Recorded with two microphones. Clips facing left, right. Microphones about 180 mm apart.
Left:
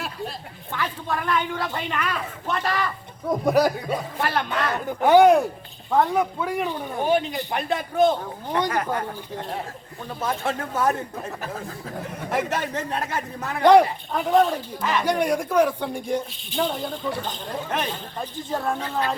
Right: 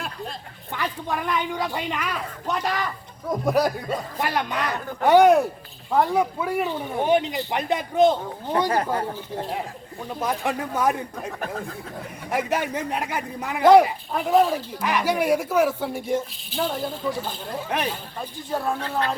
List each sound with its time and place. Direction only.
0.7 s speech: 15° right (ahead or behind)
3.2 s speech: centre (ahead or behind)
4.2 s speech: 15° right (ahead or behind)
5.0 s speech: centre (ahead or behind); by 8.1 s 20° right (ahead or behind)
8.7 s speech: 30° right (ahead or behind)
10.1 s speech: 15° right (ahead or behind)
12.3 s speech: 10° right (ahead or behind)
18.8 s speech: 10° left (ahead or behind)